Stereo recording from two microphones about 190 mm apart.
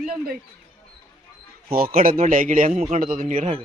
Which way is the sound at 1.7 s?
50° right (ahead or behind).